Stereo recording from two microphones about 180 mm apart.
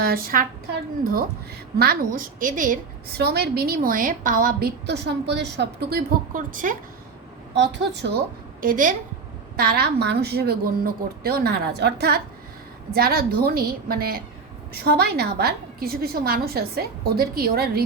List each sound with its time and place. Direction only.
0.0 s a woman's voice: 55° right (ahead or behind)
1.8 s a woman's voice: 55° right (ahead or behind); by 6.0 s 70° right (ahead or behind)
6.3 s a woman's voice: 45° right (ahead or behind)
7.5 s a woman's voice: 70° right (ahead or behind)
8.6 s a woman's voice: 45° right (ahead or behind)
9.6 s a woman's voice: 60° right (ahead or behind)